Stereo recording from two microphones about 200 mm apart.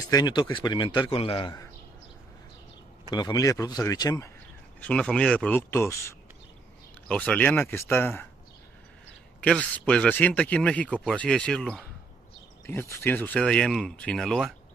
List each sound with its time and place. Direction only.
0.1 s a man's voice: 20° left (ahead or behind)
3.1 s a man's voice: 20° left (ahead or behind)
4.7 s speech: 5° left (ahead or behind)
9.4 s speech: 5° left (ahead or behind)